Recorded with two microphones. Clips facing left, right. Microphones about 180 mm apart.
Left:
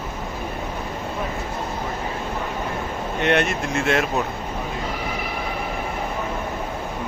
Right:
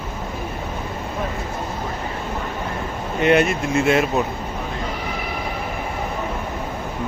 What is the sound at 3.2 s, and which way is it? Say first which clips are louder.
Speech: right 4 dB; 5° right (ahead or behind).